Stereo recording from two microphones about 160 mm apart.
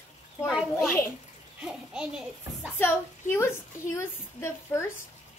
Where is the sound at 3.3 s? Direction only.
15° left (ahead or behind).